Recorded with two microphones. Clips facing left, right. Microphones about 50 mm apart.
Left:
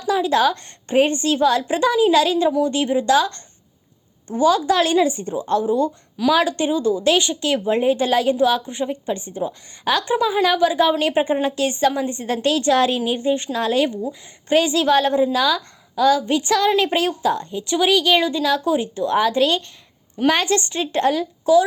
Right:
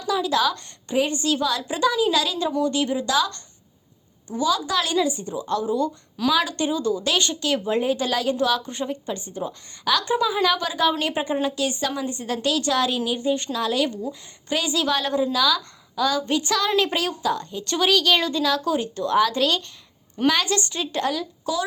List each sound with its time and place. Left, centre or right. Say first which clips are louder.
0.0 s a woman's voice: left 4 dB; left
9.1 s a woman's voice: left 4 dB; left
11.4 s a woman's voice: left 6 dB; left
17.6 s a woman's voice: left 3 dB; centre; by 21.6 s left